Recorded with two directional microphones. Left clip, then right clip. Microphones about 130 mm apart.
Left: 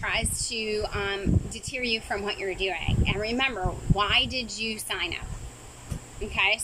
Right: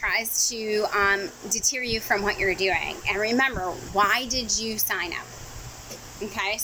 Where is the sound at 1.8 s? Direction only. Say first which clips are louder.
Even; 55° right (ahead or behind).